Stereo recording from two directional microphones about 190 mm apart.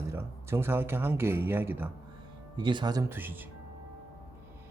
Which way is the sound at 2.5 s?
25° right (ahead or behind).